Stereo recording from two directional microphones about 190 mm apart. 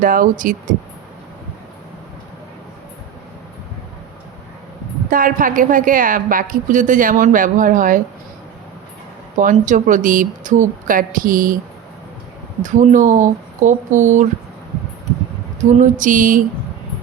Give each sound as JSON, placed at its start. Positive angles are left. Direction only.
{"t": 0.0, "sound": "a woman's voice", "side_deg": -45}
{"t": 5.1, "sound": "a woman's voice", "side_deg": -45}
{"t": 9.4, "sound": "a woman's voice", "side_deg": -45}
{"t": 12.6, "sound": "speech", "side_deg": -40}
{"t": 15.8, "sound": "a woman's voice", "side_deg": -45}